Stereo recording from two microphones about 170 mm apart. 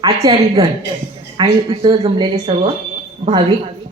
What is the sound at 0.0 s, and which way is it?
Speech, 20° right (ahead or behind).